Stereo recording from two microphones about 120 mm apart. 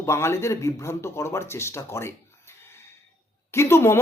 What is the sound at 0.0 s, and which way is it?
Speech, 20° left (ahead or behind).